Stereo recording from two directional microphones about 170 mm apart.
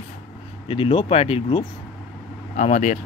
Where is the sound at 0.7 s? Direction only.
30° left (ahead or behind).